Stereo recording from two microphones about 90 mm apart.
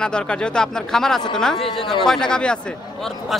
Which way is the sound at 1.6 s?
65° left (ahead or behind).